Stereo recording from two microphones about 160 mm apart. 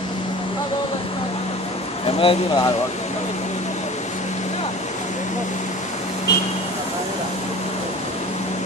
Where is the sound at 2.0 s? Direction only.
35° left (ahead or behind).